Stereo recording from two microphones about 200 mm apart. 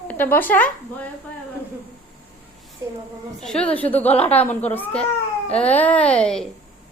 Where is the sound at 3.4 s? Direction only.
5° left (ahead or behind).